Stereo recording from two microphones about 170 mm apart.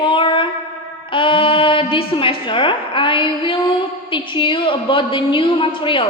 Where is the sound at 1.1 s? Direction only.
30° left (ahead or behind).